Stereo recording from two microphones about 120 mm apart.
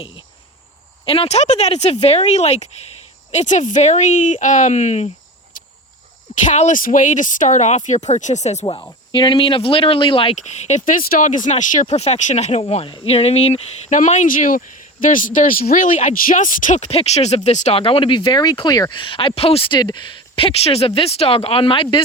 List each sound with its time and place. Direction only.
1.0 s speech: 50° left (ahead or behind)
3.3 s speech: 90° left; by 5.1 s 70° left (ahead or behind)
5.5 s cricket: 90° left
6.3 s speech: 80° left
7.9 s speech: 75° left (ahead or behind)
9.1 s speech: 45° left (ahead or behind)
10.3 s speech: 75° left (ahead or behind)
17.7 s speech: 50° left (ahead or behind)